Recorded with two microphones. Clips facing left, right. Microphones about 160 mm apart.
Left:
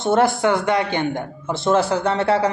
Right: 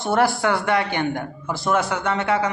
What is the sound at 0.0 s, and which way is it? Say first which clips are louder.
A man's voice: left 3 dB; 20° left (ahead or behind).